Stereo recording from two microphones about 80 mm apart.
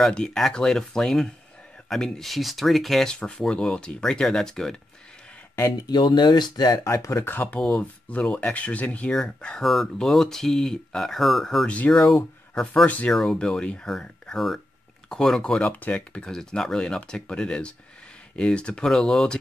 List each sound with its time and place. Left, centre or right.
0.0 s speech: centre
5.9 s speech: left
6.8 s speech: left
7.2 s speech: left; by 11.6 s centre
11.6 s speech: centre
11.9 s speech: centre
12.8 s speech: centre
13.1 s speech: centre